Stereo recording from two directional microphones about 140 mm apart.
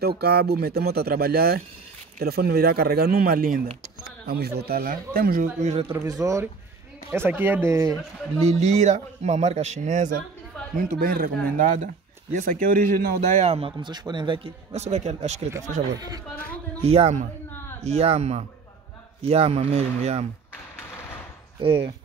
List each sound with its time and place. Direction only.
0.4 s a man's voice: 90° right
6.0 s speech: 25° right (ahead or behind)
8.5 s speech: 55° right (ahead or behind)
10.8 s speech: 90° right
13.4 s a man's voice: 45° right (ahead or behind)
16.8 s a man's voice: 45° right (ahead or behind)
21.5 s speech: 35° right (ahead or behind)